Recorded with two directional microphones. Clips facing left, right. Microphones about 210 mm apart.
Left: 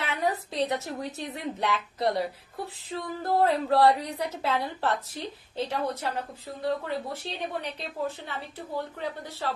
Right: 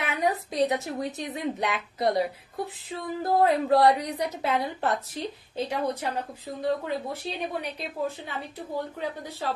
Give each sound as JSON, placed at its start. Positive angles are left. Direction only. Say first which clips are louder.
{"t": 0.0, "sound": "a woman's voice", "louder": "right 2 dB", "side_deg": -15}